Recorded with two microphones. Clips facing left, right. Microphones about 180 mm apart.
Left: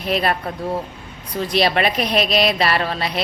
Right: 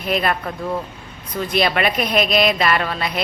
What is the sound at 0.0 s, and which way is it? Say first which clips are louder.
Speech: even; 35° left (ahead or behind).